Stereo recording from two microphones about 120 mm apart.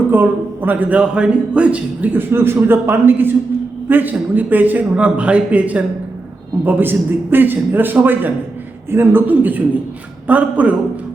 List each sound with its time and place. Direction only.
0.1 s a man's voice: 15° right (ahead or behind)